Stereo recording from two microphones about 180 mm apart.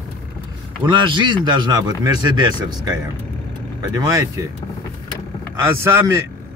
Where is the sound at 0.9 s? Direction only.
25° right (ahead or behind).